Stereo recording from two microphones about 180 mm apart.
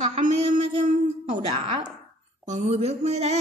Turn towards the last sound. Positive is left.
turn(degrees=-40)  # may be behind; listen again after turning